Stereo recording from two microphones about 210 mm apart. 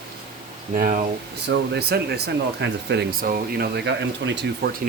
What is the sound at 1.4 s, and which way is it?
Speech, 55° right (ahead or behind).